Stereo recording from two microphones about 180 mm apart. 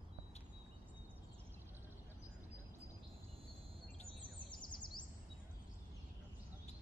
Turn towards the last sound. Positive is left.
turn(degrees=25)  # may be behind; listen again after turning